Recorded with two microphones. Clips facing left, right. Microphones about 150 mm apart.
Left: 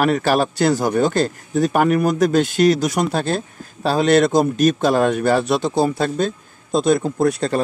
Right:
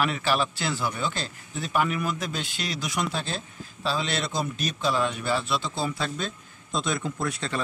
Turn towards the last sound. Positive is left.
turn(degrees=40)  # may be behind; listen again after turning